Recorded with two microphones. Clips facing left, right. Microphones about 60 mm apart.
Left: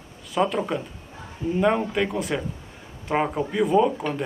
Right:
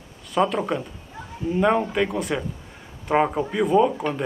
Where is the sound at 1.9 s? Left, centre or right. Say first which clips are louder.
Right 1 dB; centre.